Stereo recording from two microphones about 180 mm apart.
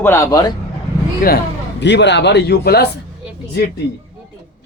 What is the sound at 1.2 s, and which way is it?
Speech, 55° left (ahead or behind).